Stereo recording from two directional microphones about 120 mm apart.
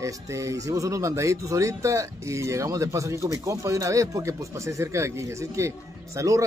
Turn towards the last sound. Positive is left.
turn(degrees=-25)  # may be behind; listen again after turning